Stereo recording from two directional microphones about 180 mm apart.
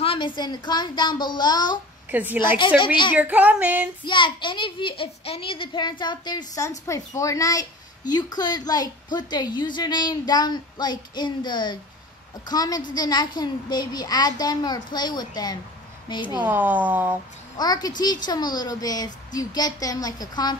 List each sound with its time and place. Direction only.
0.0 s a sound: 30° left (ahead or behind)
0.4 s a woman's voice: 25° left (ahead or behind)
2.0 s a woman's voice: 10° right (ahead or behind)
4.0 s a woman's voice: 25° left (ahead or behind)
16.3 s speech: 10° right (ahead or behind)
17.6 s a woman's voice: 20° left (ahead or behind)